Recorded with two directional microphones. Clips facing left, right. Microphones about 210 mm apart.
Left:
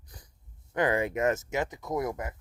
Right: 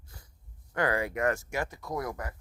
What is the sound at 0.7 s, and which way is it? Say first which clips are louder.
Speech: left 2 dB; 20° left (ahead or behind).